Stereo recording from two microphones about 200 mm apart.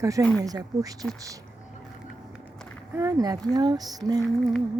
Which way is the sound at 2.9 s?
15° right (ahead or behind).